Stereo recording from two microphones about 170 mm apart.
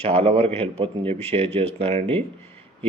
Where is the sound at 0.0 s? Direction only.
35° right (ahead or behind).